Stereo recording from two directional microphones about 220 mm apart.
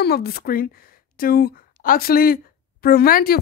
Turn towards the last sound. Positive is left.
turn(degrees=40)  # may be behind; listen again after turning